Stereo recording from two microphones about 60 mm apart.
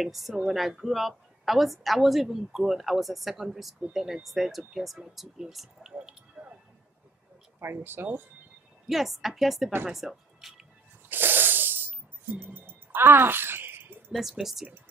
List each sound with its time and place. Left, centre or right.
0.0 s a woman's voice: centre
7.6 s speech: right
8.8 s a woman's voice: centre
11.1 s a sound: right
14.1 s a woman's voice: centre